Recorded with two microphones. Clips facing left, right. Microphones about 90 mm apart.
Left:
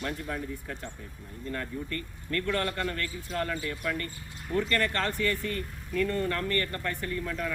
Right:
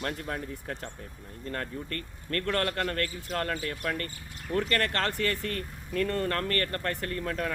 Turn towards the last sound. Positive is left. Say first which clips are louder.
# right 1 dB
turn(degrees=-50)  # may be behind; listen again after turning